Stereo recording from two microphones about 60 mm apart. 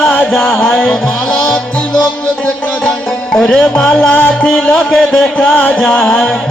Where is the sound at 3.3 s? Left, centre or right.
Centre.